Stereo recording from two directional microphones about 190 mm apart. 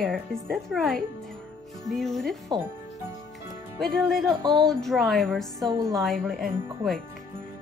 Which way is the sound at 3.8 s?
Centre (ahead or behind).